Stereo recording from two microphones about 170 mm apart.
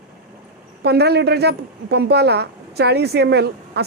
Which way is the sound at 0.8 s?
70° right (ahead or behind).